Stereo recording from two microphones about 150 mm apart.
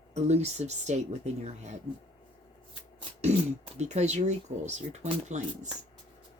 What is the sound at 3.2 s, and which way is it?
Speech, 45° right (ahead or behind).